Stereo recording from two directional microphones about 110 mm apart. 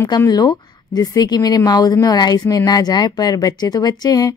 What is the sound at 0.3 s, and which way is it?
A woman's voice, 35° left (ahead or behind).